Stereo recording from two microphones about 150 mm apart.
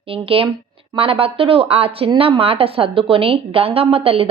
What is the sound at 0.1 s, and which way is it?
Speech, 35° right (ahead or behind).